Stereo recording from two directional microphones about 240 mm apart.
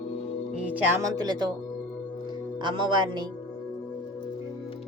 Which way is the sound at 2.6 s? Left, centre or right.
Centre.